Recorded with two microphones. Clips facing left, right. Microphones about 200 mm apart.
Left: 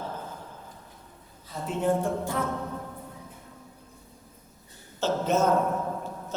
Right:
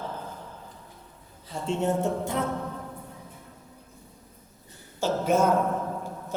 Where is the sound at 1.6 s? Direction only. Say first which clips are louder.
Even; 25° right (ahead or behind).